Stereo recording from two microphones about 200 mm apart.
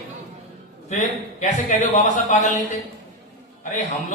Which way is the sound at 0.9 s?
35° left (ahead or behind).